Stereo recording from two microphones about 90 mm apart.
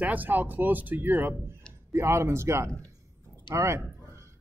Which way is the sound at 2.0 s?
30° right (ahead or behind).